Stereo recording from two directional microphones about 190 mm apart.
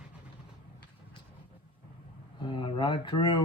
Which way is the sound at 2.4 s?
25° left (ahead or behind).